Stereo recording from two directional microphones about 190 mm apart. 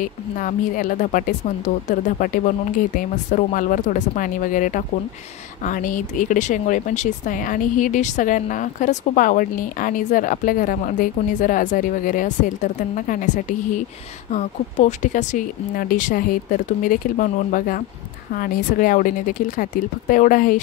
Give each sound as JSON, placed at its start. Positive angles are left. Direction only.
{"t": 0.0, "sound": "speech", "side_deg": 45}